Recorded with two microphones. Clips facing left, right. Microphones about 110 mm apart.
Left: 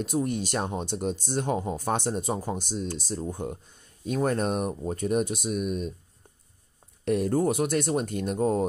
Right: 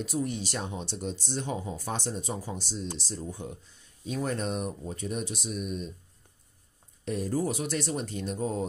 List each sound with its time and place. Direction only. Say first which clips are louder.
0.0 s speech: left 4 dB; 50° left (ahead or behind)
7.1 s speech: left 6 dB; 60° left (ahead or behind)